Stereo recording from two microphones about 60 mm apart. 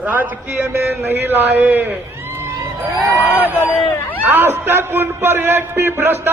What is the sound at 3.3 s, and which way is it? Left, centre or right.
Speech, right.